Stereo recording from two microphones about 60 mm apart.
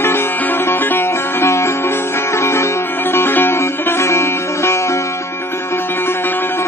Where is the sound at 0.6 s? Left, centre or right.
Left.